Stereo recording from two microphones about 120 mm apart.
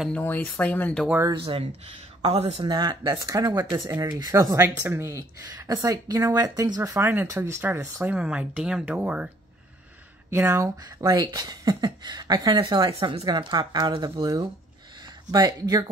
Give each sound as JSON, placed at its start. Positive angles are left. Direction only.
{"t": 0.1, "sound": "speech", "side_deg": 15}
{"t": 1.3, "sound": "speech", "side_deg": -50}
{"t": 2.7, "sound": "speech", "side_deg": -40}
{"t": 3.9, "sound": "speech", "side_deg": -20}
{"t": 4.2, "sound": "speech", "side_deg": -30}
{"t": 10.3, "sound": "speech", "side_deg": -20}
{"t": 15.3, "sound": "speech", "side_deg": -30}